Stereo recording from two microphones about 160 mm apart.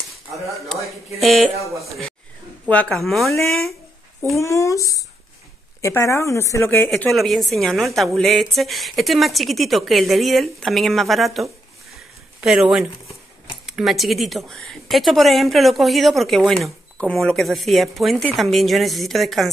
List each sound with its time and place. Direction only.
0.1 s a sound: centre (ahead or behind)
1.2 s speech: centre (ahead or behind)
4.4 s speech: 20° left (ahead or behind)
6.9 s speech: centre (ahead or behind)
13.7 s speech: centre (ahead or behind)